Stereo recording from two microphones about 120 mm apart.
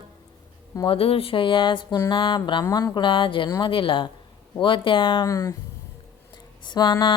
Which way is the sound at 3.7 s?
45° left (ahead or behind).